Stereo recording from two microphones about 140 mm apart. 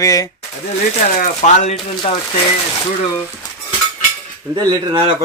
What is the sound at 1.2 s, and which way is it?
Speech, 60° left (ahead or behind).